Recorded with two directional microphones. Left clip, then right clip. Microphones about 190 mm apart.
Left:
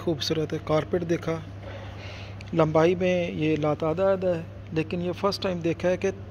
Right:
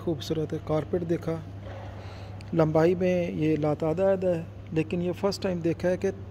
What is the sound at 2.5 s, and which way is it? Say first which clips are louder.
A man's voice: left 2 dB; 25° right (ahead or behind).